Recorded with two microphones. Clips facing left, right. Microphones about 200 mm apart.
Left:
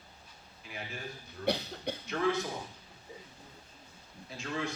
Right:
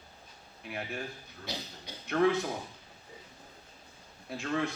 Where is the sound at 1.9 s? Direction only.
60° left (ahead or behind).